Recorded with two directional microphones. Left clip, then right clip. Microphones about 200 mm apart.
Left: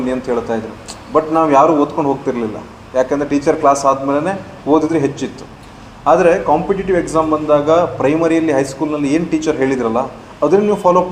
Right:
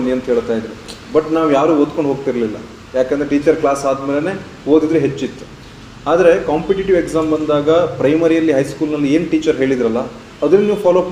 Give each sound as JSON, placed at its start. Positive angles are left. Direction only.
{"t": 0.3, "sound": "a man's voice", "side_deg": 20}
{"t": 6.1, "sound": "a man's voice", "side_deg": 25}